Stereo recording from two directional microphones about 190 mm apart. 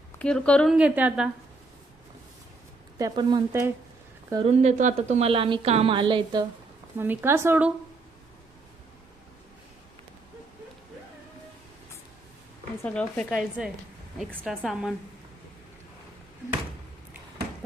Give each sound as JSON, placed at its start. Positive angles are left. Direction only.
{"t": 0.2, "sound": "speech", "side_deg": 5}
{"t": 3.0, "sound": "speech", "side_deg": -20}
{"t": 4.4, "sound": "a woman's voice", "side_deg": -35}
{"t": 6.9, "sound": "speech", "side_deg": -10}
{"t": 12.8, "sound": "speech", "side_deg": 5}